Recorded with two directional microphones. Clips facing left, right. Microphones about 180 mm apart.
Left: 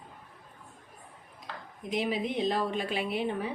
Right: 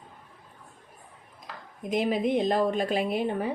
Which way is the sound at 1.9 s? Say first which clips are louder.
Right 5 dB; 50° right (ahead or behind).